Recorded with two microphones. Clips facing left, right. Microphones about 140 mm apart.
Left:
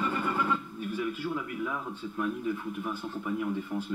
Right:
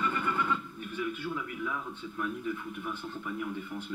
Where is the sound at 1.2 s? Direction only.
30° left (ahead or behind).